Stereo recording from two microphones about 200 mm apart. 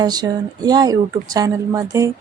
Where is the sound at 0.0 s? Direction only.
20° right (ahead or behind).